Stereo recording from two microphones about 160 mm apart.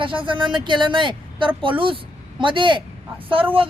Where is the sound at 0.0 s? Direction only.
30° right (ahead or behind).